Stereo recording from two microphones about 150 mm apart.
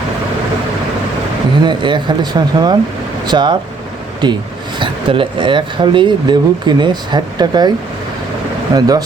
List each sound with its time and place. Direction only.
1.6 s speech: 30° right (ahead or behind)
8.7 s speech: 25° right (ahead or behind)